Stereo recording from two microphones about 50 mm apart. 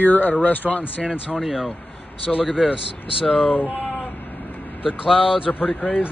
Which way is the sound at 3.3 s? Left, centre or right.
Left.